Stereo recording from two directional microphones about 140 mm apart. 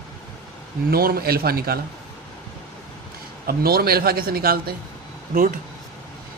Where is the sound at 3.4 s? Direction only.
90° right.